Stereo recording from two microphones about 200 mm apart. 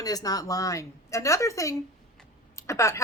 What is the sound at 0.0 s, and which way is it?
A woman's voice, 20° left (ahead or behind).